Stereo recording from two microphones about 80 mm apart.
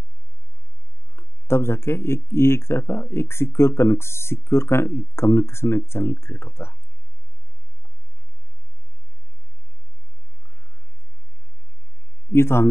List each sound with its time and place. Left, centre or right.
1.1 s speech: left
12.3 s speech: left